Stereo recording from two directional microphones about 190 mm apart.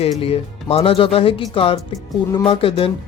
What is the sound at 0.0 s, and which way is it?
Speech, 30° left (ahead or behind).